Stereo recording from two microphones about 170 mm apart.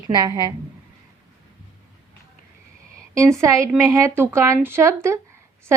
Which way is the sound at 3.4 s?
15° right (ahead or behind).